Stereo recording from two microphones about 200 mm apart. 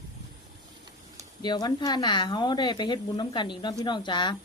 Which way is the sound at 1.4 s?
20° left (ahead or behind).